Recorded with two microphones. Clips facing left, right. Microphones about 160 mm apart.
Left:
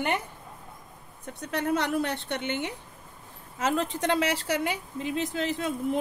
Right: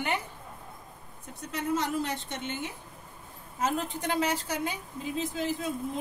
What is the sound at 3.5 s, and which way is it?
A woman's voice, 85° left.